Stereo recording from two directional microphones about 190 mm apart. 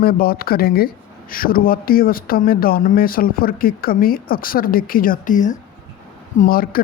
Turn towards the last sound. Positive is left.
turn(degrees=50)  # may be behind; listen again after turning